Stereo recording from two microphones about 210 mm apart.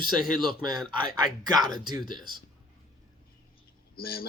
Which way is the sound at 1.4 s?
20° right (ahead or behind).